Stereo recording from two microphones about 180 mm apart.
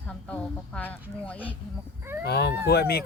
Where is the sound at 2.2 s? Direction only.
65° left (ahead or behind).